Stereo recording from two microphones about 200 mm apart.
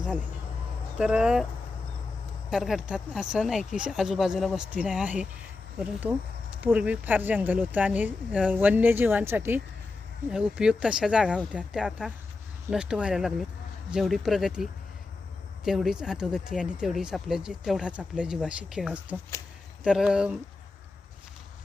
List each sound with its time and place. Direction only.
0.9 s speech: 5° right (ahead or behind)
2.5 s speech: centre (ahead or behind)